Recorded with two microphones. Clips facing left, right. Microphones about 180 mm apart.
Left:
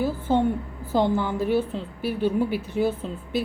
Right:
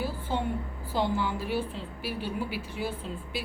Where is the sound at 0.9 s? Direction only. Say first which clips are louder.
Left 6 dB; 50° left (ahead or behind).